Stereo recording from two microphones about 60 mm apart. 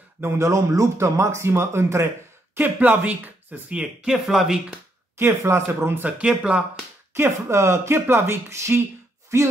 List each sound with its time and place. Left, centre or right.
0.2 s speech: right
2.5 s speech: right
3.7 s speech: centre
5.4 s speech: right
6.2 s speech: centre
7.2 s speech: right